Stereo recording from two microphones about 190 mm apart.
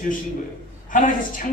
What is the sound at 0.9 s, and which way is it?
Speech, 45° left (ahead or behind).